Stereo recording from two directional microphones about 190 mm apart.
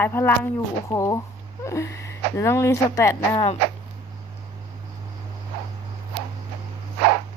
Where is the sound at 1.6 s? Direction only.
15° left (ahead or behind).